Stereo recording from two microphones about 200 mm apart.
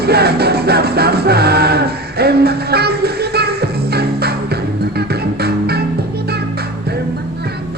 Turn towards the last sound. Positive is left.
turn(degrees=-55)  # may be behind; listen again after turning